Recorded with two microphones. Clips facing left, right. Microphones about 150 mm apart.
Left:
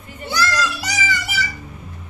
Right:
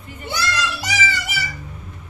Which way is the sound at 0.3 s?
20° right (ahead or behind).